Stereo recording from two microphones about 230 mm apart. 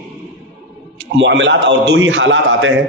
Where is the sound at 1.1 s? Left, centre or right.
Right.